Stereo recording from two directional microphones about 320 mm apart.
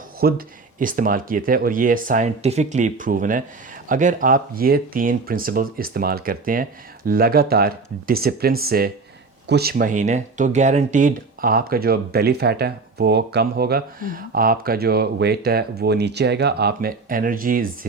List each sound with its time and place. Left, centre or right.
0.2 s speech: right